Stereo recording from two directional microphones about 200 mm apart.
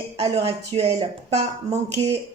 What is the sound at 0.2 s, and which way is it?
Speech, 30° right (ahead or behind).